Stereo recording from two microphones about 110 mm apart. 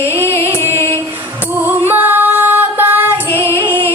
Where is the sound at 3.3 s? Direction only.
20° left (ahead or behind).